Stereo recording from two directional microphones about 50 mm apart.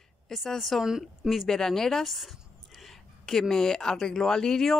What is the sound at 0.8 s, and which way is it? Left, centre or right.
Speech, centre.